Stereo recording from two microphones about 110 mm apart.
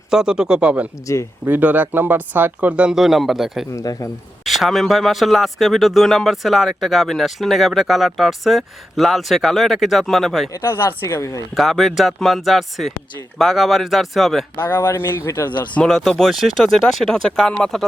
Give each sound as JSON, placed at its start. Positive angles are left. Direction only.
{"t": 0.1, "sound": "speech", "side_deg": -5}
{"t": 1.0, "sound": "speech", "side_deg": 30}
{"t": 1.5, "sound": "speech", "side_deg": -15}
{"t": 3.7, "sound": "speech", "side_deg": 30}
{"t": 4.4, "sound": "speech", "side_deg": 0}
{"t": 10.5, "sound": "speech", "side_deg": 25}
{"t": 11.5, "sound": "speech", "side_deg": 0}
{"t": 14.5, "sound": "speech", "side_deg": 20}
{"t": 15.7, "sound": "speech", "side_deg": 5}